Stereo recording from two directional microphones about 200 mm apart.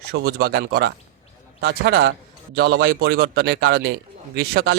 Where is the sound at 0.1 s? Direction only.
50° right (ahead or behind).